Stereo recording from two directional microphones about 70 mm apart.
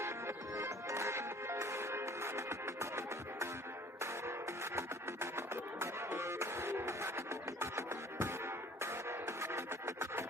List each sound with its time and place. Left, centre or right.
0.0 s music: right
4.0 s music: right